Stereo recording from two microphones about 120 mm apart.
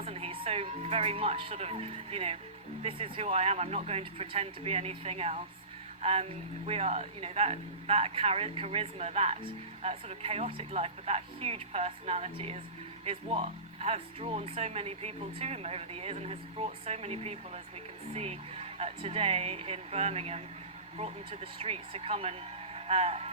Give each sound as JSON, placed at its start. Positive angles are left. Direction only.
{"t": 0.0, "sound": "speech", "side_deg": -55}